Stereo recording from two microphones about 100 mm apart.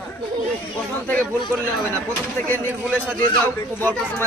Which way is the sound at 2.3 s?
20° left (ahead or behind).